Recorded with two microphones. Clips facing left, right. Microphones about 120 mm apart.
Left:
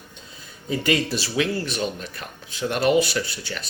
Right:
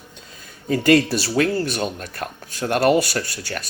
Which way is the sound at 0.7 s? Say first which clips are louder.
Right 7 dB; 50° right (ahead or behind).